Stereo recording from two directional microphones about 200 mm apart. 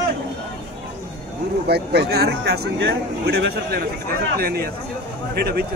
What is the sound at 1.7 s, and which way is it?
Speech, 55° right (ahead or behind).